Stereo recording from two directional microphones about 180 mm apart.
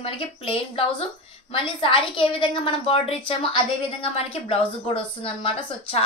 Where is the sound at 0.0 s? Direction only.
30° left (ahead or behind).